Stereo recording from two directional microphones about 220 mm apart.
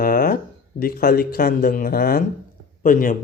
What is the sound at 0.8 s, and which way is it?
Speech, 40° left (ahead or behind).